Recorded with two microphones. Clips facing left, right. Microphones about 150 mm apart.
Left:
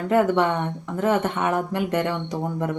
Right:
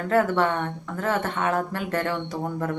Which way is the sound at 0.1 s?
15° left (ahead or behind).